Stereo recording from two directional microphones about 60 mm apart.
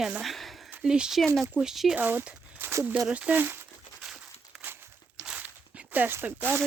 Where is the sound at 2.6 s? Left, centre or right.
Right.